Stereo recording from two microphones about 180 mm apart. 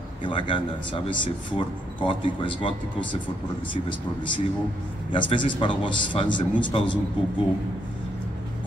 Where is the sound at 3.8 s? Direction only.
25° left (ahead or behind).